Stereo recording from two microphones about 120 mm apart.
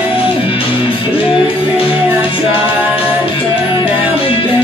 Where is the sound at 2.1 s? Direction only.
15° right (ahead or behind).